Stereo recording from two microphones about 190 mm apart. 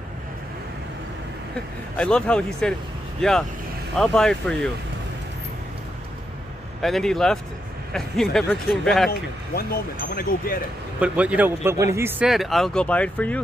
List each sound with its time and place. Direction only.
2.0 s speech: 5° left (ahead or behind)
6.8 s speech: centre (ahead or behind)
9.6 s speech: 50° left (ahead or behind)
11.0 s speech: 5° right (ahead or behind)